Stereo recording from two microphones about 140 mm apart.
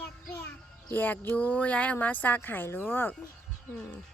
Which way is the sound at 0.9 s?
15° left (ahead or behind).